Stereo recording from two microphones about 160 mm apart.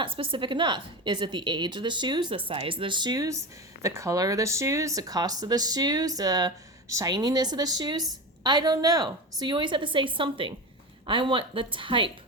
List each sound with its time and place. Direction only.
0.0 s a woman's voice: 30° right (ahead or behind)